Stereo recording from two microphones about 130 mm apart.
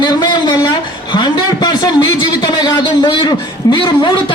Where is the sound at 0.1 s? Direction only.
30° left (ahead or behind).